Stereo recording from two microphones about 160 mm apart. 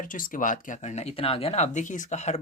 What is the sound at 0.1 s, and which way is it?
Speech, 60° left (ahead or behind).